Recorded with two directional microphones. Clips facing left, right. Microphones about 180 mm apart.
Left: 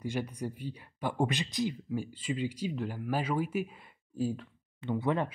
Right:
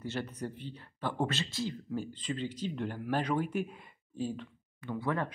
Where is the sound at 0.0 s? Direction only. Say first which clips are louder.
Left 2 dB; 10° left (ahead or behind).